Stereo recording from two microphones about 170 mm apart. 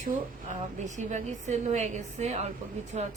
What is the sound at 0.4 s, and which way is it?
A woman's voice, 45° right (ahead or behind).